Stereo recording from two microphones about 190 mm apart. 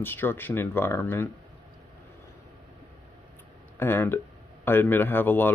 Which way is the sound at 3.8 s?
10° left (ahead or behind).